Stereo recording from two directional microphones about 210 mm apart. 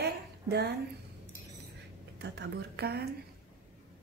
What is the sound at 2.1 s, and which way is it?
Speech, 55° right (ahead or behind).